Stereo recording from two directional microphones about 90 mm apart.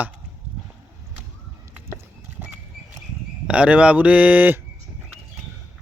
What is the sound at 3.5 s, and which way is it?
Speech, 15° right (ahead or behind).